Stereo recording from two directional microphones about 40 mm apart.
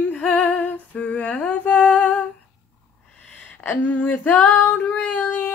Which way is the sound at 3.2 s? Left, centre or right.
Left.